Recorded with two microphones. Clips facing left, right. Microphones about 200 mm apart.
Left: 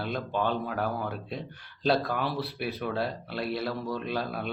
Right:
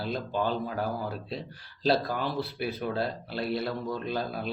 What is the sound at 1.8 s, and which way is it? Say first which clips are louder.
Speech: even; centre (ahead or behind).